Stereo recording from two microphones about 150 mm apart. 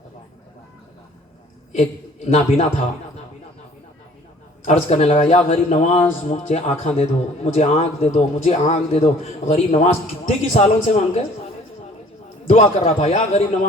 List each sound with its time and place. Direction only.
1.7 s a man's voice: 45° left (ahead or behind)
4.6 s a man's voice: 50° left (ahead or behind)
12.5 s a man's voice: 45° left (ahead or behind)